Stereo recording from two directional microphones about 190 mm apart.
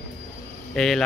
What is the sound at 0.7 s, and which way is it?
Speech, 5° left (ahead or behind).